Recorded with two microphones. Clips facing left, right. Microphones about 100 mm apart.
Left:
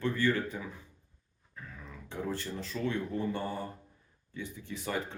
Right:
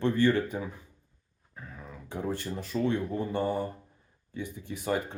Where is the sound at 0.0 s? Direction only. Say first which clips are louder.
Right 5 dB; 20° right (ahead or behind).